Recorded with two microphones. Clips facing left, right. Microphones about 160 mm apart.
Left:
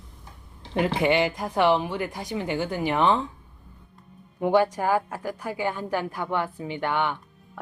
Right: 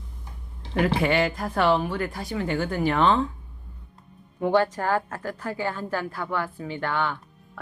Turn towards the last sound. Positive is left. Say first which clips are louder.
# left 1 dB
turn(degrees=15)  # may be behind; listen again after turning